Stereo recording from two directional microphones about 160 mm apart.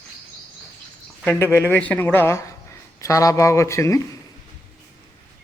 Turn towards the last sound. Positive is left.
turn(degrees=20)  # may be behind; listen again after turning